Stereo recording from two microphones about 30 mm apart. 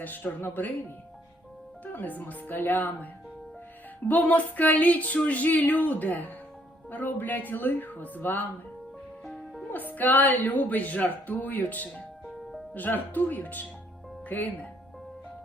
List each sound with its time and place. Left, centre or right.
0.0 s speech: left
1.8 s speech: left
4.1 s speech: left
6.9 s speech: left
9.7 s speech: left
14.3 s speech: left